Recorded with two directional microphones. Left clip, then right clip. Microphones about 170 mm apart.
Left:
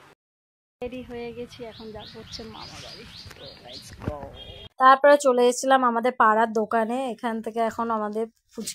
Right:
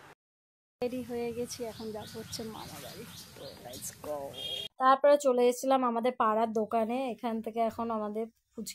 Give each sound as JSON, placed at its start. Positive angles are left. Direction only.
{"t": 0.7, "sound": "speech", "side_deg": -10}
{"t": 4.7, "sound": "a woman's voice", "side_deg": 25}